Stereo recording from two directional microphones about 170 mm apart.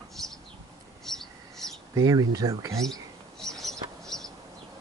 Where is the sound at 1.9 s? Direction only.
20° right (ahead or behind).